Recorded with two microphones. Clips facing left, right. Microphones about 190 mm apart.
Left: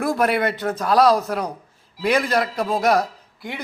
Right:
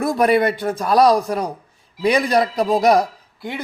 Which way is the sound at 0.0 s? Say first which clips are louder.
Right 4 dB; 15° right (ahead or behind).